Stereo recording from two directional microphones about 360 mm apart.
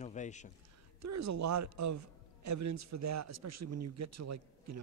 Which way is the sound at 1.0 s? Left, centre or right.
Right.